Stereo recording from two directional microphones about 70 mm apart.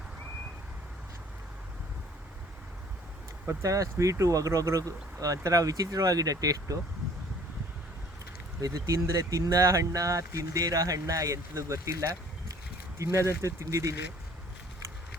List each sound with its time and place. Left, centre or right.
3.4 s speech: right
8.6 s speech: right